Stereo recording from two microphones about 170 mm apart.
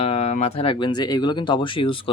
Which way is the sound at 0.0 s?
35° left (ahead or behind).